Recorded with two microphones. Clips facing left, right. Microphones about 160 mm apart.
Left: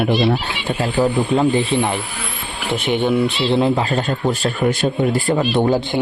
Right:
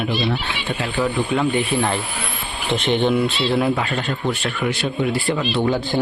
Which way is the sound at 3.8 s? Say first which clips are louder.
Left 4 dB; 40° left (ahead or behind).